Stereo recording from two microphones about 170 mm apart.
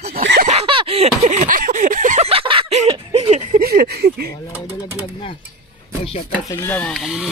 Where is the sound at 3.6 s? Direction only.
65° right (ahead or behind).